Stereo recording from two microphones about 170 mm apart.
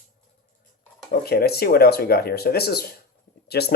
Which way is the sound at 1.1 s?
65° left (ahead or behind).